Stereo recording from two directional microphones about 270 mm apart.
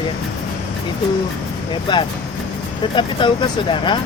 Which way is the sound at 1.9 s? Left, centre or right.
Centre.